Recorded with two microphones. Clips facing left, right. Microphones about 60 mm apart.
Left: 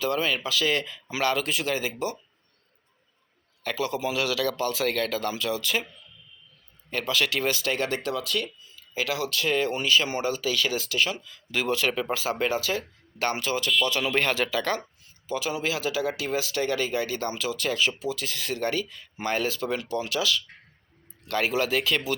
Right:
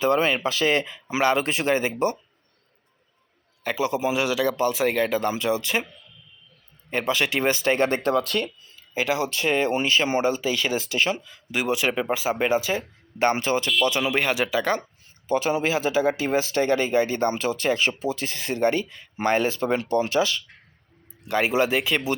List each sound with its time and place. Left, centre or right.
0.0 s speech: right
3.6 s speech: centre
6.9 s speech: right
8.4 s speech: right
11.5 s speech: centre
15.3 s speech: right
21.2 s speech: centre